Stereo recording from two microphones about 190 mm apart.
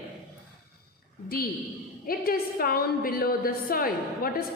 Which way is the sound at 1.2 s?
55° left (ahead or behind).